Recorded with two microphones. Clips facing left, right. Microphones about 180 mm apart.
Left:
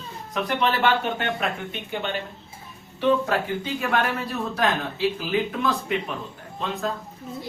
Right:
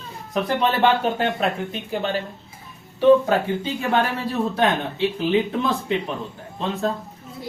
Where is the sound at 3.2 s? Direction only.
25° right (ahead or behind).